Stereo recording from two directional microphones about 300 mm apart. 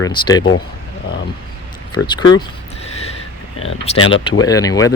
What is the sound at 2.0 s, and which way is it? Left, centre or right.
Speech, left.